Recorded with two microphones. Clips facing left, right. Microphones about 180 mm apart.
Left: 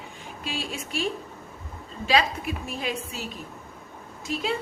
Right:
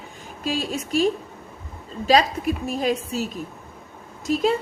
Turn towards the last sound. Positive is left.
turn(degrees=-40)  # may be behind; listen again after turning